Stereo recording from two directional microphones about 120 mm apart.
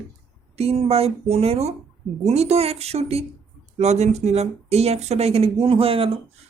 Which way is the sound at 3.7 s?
70° right (ahead or behind).